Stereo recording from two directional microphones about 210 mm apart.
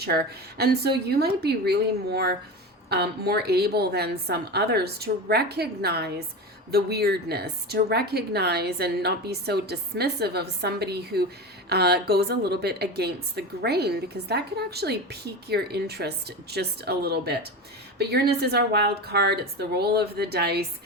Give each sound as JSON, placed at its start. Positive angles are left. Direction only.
{"t": 0.0, "sound": "a woman's voice", "side_deg": -50}